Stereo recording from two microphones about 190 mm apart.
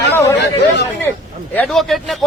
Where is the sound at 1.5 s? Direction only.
5° left (ahead or behind).